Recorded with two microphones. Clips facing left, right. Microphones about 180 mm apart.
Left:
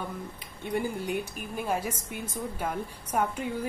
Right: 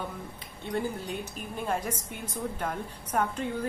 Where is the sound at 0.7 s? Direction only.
10° left (ahead or behind).